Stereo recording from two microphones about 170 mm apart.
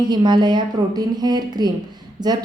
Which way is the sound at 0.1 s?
25° right (ahead or behind).